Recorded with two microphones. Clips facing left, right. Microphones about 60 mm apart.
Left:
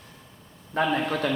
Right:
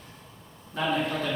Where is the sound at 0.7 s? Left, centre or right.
Left.